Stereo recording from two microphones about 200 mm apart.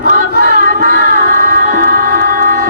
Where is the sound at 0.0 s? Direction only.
45° right (ahead or behind).